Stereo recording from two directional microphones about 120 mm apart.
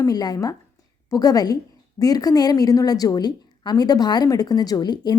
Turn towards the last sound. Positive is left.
turn(degrees=35)  # may be behind; listen again after turning